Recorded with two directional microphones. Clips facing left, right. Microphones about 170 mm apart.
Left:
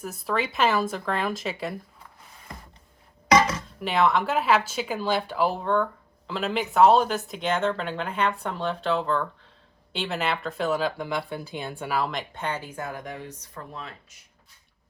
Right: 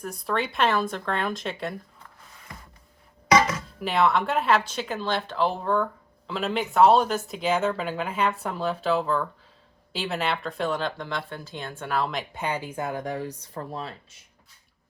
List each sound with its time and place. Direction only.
0.0 s speech: centre (ahead or behind)
3.4 s speech: centre (ahead or behind)
12.3 s speech: 10° right (ahead or behind)
13.1 s speech: 35° right (ahead or behind)